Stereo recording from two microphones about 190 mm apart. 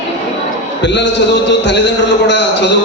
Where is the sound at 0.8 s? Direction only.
70° left (ahead or behind).